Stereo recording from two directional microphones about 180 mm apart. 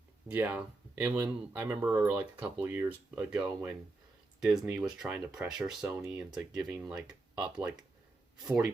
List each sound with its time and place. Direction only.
0.3 s speech: 10° right (ahead or behind)